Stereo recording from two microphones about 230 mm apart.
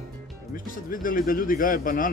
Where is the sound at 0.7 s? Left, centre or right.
Left.